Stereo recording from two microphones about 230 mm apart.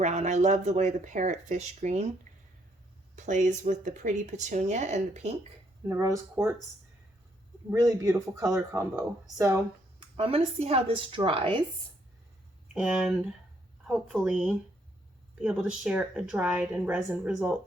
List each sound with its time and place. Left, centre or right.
0.0 s speech: right
2.3 s a sound: right
3.2 s speech: right
5.9 s speech: centre
7.7 s speech: centre
10.2 s a woman's voice: right
12.7 s speech: centre